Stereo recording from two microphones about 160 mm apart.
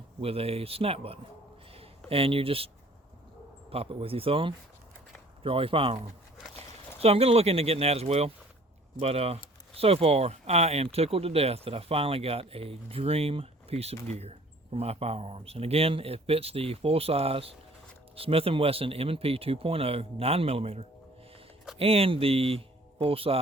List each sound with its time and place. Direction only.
0.2 s speech: 35° right (ahead or behind)
1.7 s a sound: 35° right (ahead or behind)
3.7 s speech: 35° right (ahead or behind)